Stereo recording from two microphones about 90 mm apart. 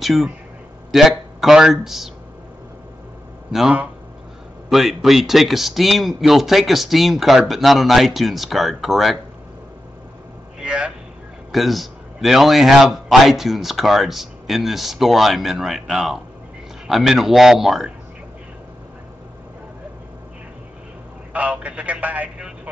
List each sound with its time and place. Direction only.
0.0 s a man's voice: centre (ahead or behind)
4.6 s a man's voice: centre (ahead or behind)
10.6 s a sound: 10° right (ahead or behind)
11.5 s a man's voice: centre (ahead or behind)
21.3 s speech: 15° right (ahead or behind)